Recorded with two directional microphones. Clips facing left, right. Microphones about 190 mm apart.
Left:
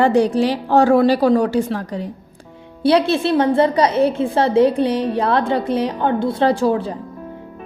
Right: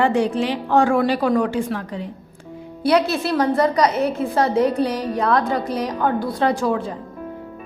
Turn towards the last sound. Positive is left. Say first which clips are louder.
# left 3 dB
turn(degrees=30)  # may be behind; listen again after turning